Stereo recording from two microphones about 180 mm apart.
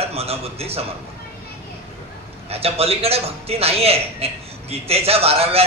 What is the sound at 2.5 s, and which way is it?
A man's voice, 35° right (ahead or behind).